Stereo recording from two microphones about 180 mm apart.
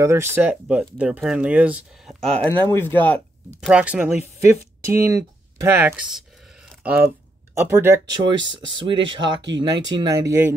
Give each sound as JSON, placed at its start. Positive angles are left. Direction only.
{"t": 0.0, "sound": "speech", "side_deg": -15}
{"t": 3.6, "sound": "speech", "side_deg": -5}